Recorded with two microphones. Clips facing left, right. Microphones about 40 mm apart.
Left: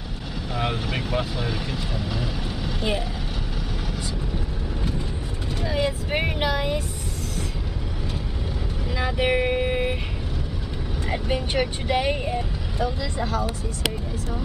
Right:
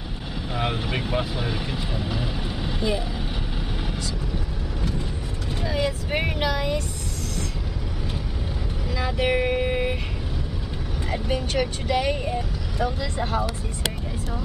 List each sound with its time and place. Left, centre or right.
0.8 s speech: centre
5.7 s speech: centre
8.9 s speech: centre
11.1 s speech: centre
13.2 s speech: right